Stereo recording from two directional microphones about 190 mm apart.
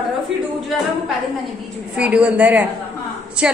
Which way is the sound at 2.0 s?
5° right (ahead or behind).